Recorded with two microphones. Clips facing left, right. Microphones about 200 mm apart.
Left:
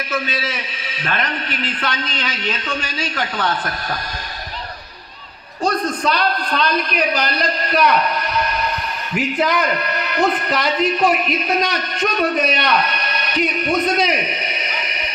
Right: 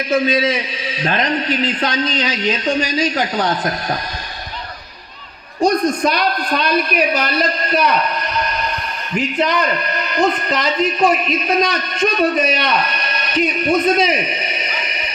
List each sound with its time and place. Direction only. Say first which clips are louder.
0.1 s a man's voice: right 10 dB; 35° right (ahead or behind)
5.6 s a man's voice: right 4 dB; 10° right (ahead or behind)
9.1 s a man's voice: right 1 dB; 5° left (ahead or behind)